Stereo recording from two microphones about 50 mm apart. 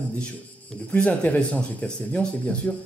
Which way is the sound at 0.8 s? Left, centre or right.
Left.